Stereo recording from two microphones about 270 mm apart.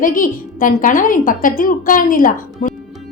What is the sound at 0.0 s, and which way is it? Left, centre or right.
A woman's voice, left.